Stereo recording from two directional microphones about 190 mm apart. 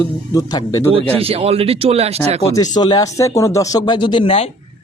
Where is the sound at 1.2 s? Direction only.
30° right (ahead or behind).